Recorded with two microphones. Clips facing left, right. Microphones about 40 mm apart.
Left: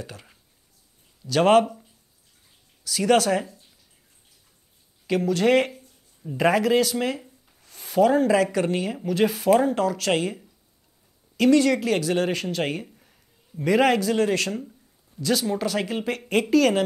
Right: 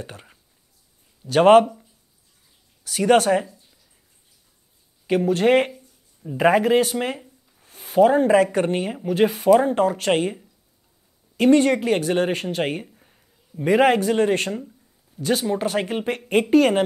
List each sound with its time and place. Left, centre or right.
0.0 s speech: right
2.8 s speech: right
5.0 s speech: right
13.0 s a sound: centre
13.7 s speech: right